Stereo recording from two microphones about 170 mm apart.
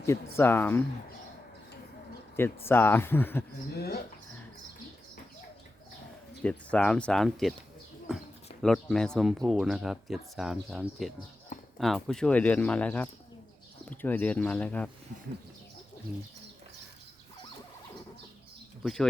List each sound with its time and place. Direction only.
0.0 s speech: 15° left (ahead or behind)
2.6 s speech: 10° left (ahead or behind)
3.8 s speech: 65° left (ahead or behind)
6.4 s speech: 5° left (ahead or behind)
8.6 s speech: centre (ahead or behind)
18.8 s speech: centre (ahead or behind)